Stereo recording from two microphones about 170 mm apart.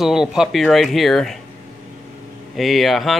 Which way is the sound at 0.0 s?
5° right (ahead or behind).